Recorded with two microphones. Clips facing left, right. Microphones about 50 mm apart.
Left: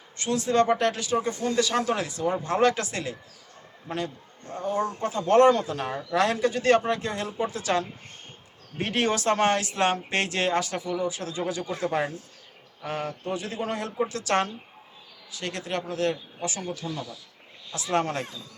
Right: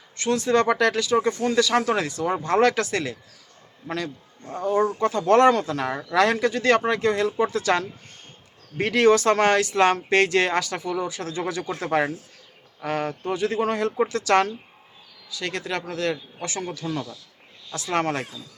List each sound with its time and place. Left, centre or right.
0.2 s speech: right
3.8 s a man's voice: right
4.8 s speech: right
6.1 s speech: right
8.8 s speech: right
10.8 s speech: right
12.8 s speech: right